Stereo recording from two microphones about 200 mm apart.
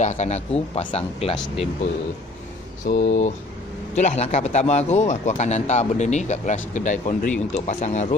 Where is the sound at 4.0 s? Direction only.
35° left (ahead or behind).